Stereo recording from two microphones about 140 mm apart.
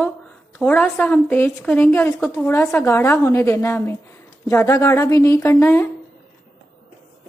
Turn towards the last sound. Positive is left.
turn(degrees=15)  # may be behind; listen again after turning